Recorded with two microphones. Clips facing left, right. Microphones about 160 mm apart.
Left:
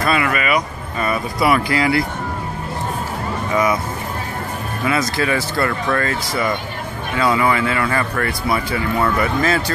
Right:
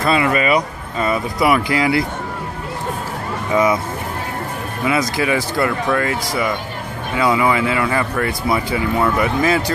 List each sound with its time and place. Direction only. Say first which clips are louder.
0.0 s speech: right 2 dB; 25° right (ahead or behind)
4.8 s speech: right 1 dB; 15° right (ahead or behind)